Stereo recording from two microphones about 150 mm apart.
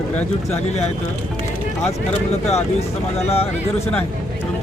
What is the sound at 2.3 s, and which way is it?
Speech, 45° left (ahead or behind).